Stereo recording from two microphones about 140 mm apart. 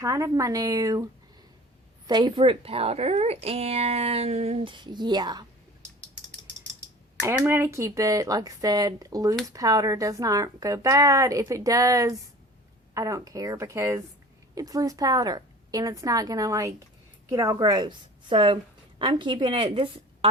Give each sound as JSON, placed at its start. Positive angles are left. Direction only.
{"t": 0.0, "sound": "speech", "side_deg": -20}
{"t": 2.0, "sound": "speech", "side_deg": -30}
{"t": 7.3, "sound": "a woman's voice", "side_deg": -15}